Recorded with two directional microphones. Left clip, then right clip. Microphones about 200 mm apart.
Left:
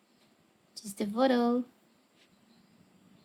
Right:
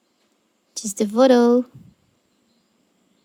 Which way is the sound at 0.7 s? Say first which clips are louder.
Right 13 dB; 35° right (ahead or behind).